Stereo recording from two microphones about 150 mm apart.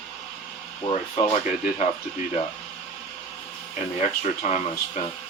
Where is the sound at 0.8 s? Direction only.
40° left (ahead or behind).